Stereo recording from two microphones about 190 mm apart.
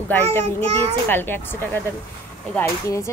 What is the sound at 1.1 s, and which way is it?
Speech, 10° left (ahead or behind).